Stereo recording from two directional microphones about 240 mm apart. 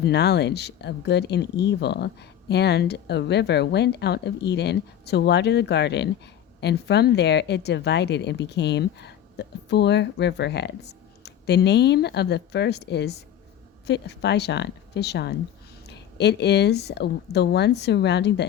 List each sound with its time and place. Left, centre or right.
0.0 s speech: left